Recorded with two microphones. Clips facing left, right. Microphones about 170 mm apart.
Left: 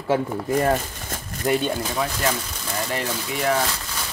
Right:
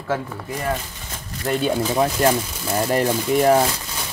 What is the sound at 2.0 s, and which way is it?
Speech, 40° right (ahead or behind).